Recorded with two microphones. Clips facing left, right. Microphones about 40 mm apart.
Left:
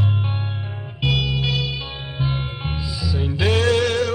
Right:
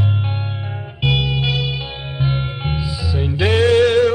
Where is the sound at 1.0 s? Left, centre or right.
Centre.